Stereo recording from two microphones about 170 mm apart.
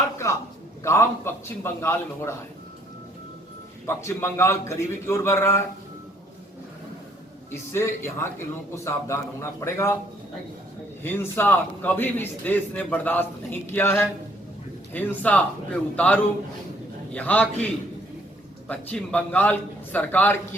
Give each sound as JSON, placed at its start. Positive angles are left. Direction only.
{"t": 0.8, "sound": "a man's voice", "side_deg": 15}
{"t": 3.8, "sound": "a man's voice", "side_deg": 15}
{"t": 7.7, "sound": "a man's voice", "side_deg": 15}
{"t": 11.0, "sound": "a man's voice", "side_deg": 10}
{"t": 18.7, "sound": "a man's voice", "side_deg": 10}